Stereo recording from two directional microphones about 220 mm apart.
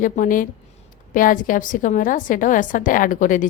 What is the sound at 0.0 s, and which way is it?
A woman's voice, 35° left (ahead or behind).